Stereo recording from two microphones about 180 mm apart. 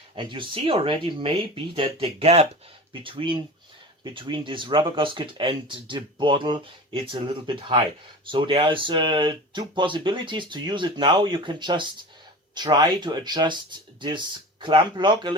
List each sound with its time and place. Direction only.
0.2 s speech: 30° right (ahead or behind)